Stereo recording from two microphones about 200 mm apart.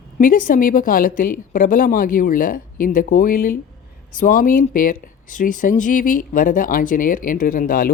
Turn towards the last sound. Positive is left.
turn(degrees=45)  # may be behind; listen again after turning